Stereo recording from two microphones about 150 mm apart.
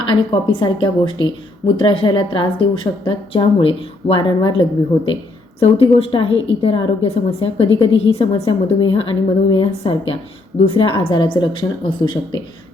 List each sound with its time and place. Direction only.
0.0 s a woman's voice: 35° left (ahead or behind)